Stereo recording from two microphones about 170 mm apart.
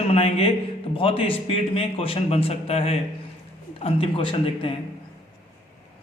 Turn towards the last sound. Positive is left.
turn(degrees=30)  # may be behind; listen again after turning